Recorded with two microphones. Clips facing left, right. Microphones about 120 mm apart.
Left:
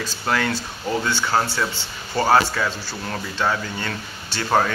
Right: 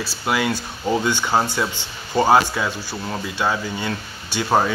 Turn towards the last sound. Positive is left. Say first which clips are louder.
# right 1 dB
turn(degrees=-10)  # may be behind; listen again after turning